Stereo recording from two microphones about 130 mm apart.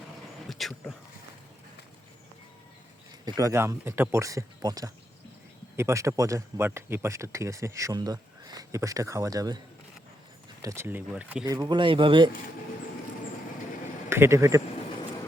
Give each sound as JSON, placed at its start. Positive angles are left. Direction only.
{"t": 0.5, "sound": "a sound", "side_deg": 0}
{"t": 3.2, "sound": "a man's voice", "side_deg": -25}
{"t": 10.6, "sound": "speech", "side_deg": -20}
{"t": 11.4, "sound": "speech", "side_deg": -30}
{"t": 14.1, "sound": "a man's voice", "side_deg": -20}